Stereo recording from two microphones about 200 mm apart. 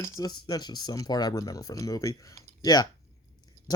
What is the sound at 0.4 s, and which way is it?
Speech, 20° left (ahead or behind).